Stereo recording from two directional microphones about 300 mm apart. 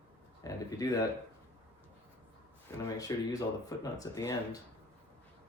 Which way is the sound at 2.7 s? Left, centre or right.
Centre.